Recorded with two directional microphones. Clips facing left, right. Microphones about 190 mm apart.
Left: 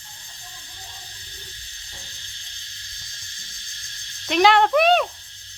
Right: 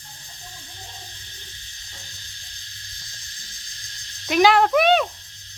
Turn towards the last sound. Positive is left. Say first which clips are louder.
# even
turn(degrees=0)  # may be behind; listen again after turning